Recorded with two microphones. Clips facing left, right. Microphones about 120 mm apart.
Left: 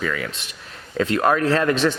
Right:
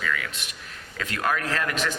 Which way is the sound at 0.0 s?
35° left (ahead or behind).